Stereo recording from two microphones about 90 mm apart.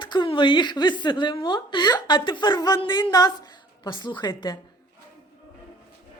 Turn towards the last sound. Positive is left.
turn(degrees=50)  # may be behind; listen again after turning